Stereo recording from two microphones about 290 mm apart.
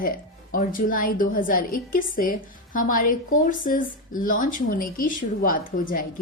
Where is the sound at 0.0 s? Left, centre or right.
Left.